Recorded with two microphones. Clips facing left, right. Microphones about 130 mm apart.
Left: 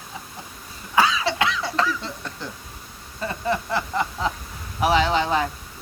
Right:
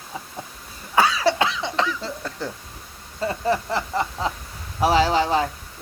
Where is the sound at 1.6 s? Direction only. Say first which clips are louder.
Even; 25° right (ahead or behind).